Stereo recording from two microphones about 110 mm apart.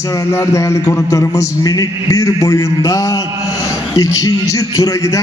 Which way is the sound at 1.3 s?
35° left (ahead or behind).